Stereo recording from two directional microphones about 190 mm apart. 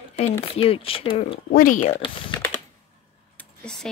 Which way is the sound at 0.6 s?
30° left (ahead or behind).